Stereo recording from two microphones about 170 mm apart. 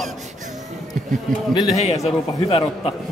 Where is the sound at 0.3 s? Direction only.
45° right (ahead or behind).